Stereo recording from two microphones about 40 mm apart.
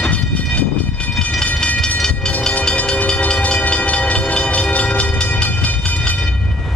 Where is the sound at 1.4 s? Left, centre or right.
Left.